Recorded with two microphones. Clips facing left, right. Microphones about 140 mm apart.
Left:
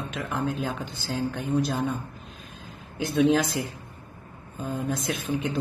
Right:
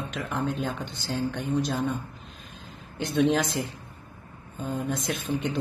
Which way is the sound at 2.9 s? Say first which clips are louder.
Left 1 dB; centre (ahead or behind).